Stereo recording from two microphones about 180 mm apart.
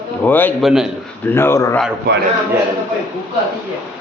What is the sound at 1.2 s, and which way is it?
Speech, 15° left (ahead or behind).